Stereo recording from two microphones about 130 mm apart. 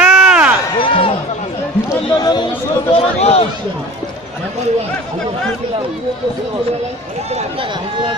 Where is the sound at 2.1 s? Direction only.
35° left (ahead or behind).